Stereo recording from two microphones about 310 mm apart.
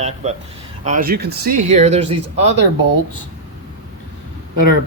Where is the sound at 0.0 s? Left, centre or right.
Right.